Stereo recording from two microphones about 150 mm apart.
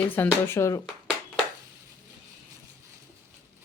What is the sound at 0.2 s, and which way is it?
Speech, 15° left (ahead or behind).